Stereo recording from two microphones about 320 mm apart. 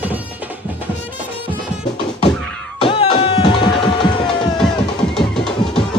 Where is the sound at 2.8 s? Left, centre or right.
Centre.